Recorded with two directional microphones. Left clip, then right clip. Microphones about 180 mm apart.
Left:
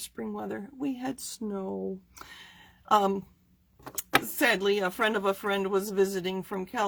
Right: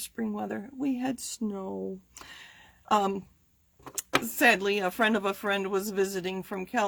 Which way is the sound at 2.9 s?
35° right (ahead or behind).